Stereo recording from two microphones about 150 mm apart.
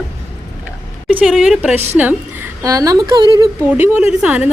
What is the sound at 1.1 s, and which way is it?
Speech, centre (ahead or behind).